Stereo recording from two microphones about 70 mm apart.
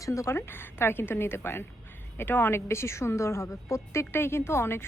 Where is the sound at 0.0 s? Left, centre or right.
Left.